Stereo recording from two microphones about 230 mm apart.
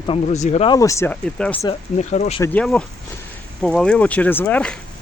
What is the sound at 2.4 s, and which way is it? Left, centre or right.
Speech, centre.